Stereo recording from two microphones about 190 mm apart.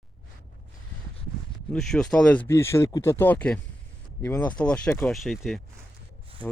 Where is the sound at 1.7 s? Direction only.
5° left (ahead or behind).